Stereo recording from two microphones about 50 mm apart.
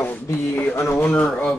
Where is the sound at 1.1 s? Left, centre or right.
Centre.